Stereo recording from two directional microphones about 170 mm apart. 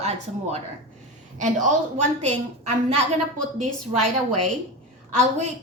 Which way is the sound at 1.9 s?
40° right (ahead or behind).